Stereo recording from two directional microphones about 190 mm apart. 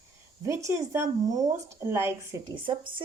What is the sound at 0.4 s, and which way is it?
A woman's voice, 15° right (ahead or behind).